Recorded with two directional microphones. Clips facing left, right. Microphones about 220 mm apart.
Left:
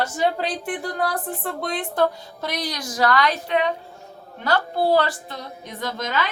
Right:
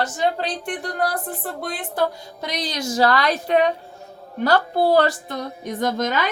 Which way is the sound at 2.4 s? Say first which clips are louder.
Right 2 dB; 20° right (ahead or behind).